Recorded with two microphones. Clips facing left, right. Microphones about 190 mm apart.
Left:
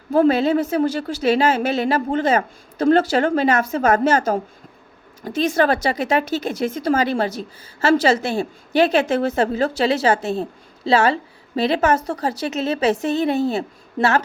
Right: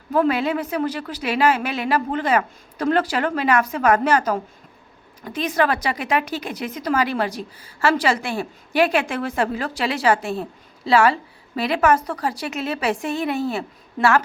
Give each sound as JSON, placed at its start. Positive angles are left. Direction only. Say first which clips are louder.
{"t": 0.1, "sound": "speech", "louder": "left 4 dB", "side_deg": 25}